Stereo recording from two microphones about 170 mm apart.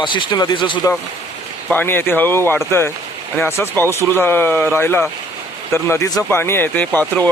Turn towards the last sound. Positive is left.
turn(degrees=10)  # may be behind; listen again after turning